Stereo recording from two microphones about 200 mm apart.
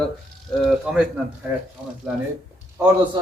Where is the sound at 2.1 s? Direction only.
Centre (ahead or behind).